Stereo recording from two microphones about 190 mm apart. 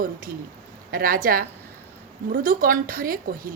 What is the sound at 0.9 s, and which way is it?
A woman's voice, 50° right (ahead or behind).